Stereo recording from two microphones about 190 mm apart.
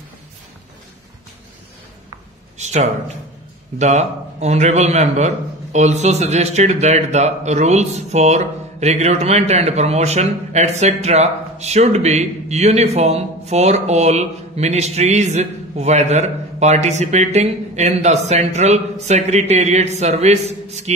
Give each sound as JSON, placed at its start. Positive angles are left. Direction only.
{"t": 2.6, "sound": "speech", "side_deg": -35}